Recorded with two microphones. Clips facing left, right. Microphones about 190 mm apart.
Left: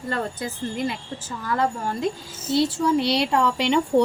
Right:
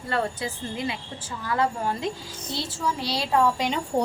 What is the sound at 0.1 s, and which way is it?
Speech, 45° left (ahead or behind).